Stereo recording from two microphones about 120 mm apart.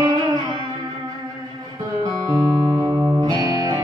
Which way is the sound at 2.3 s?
30° right (ahead or behind).